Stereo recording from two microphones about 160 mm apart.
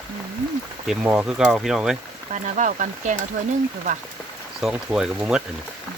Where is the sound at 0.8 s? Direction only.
5° right (ahead or behind).